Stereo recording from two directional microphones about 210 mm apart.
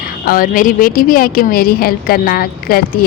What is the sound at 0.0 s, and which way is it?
A woman's voice, 45° left (ahead or behind).